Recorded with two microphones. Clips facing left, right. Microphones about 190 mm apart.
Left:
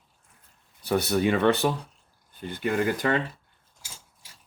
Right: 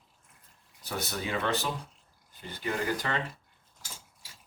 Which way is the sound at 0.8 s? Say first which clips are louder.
Left 11 dB; 65° left (ahead or behind).